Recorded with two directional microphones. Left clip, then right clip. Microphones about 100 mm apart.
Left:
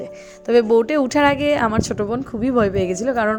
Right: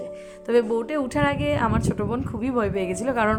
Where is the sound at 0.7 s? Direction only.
65° left (ahead or behind).